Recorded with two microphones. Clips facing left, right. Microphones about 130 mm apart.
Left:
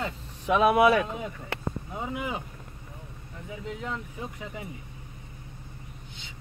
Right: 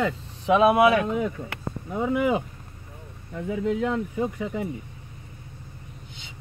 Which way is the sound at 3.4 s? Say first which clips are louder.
Right 12 dB; 60° right (ahead or behind).